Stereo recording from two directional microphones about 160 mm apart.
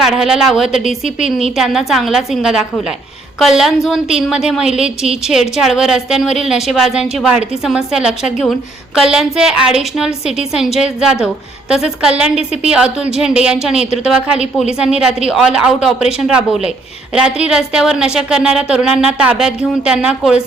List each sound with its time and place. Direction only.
0.0 s a woman's voice: 5° right (ahead or behind)
1.0 s a woman's voice: 45° left (ahead or behind)
1.5 s a woman's voice: centre (ahead or behind)